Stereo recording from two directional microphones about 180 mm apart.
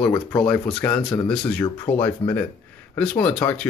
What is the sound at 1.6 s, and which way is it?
Speech, 25° left (ahead or behind).